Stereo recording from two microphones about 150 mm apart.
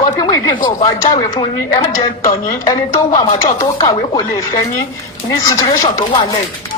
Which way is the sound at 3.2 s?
35° left (ahead or behind).